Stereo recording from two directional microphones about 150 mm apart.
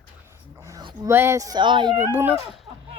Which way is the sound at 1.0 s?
15° right (ahead or behind).